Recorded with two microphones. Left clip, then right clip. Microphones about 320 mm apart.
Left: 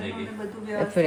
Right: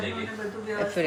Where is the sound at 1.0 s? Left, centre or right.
Centre.